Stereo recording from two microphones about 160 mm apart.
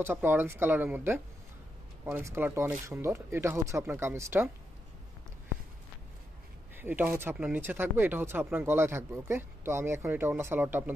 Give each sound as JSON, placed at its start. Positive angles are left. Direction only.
{"t": 0.0, "sound": "speech", "side_deg": -15}
{"t": 6.8, "sound": "speech", "side_deg": -10}